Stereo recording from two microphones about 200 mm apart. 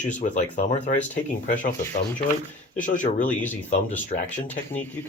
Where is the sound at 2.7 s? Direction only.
40° left (ahead or behind).